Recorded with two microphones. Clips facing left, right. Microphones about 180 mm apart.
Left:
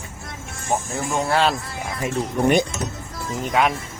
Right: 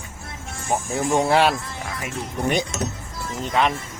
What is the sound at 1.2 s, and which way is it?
Speech, 15° right (ahead or behind).